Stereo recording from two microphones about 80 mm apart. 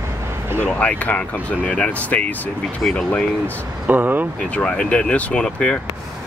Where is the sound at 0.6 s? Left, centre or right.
Centre.